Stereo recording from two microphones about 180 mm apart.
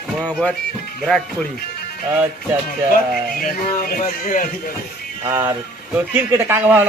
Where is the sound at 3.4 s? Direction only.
50° left (ahead or behind).